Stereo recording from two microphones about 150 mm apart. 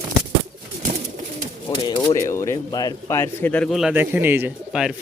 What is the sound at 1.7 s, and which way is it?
Speech, 30° left (ahead or behind).